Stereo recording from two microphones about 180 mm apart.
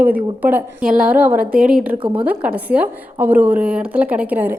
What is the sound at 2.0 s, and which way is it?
Speech, 30° right (ahead or behind).